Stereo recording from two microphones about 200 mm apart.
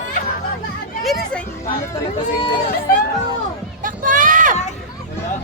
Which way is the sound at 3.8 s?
40° right (ahead or behind).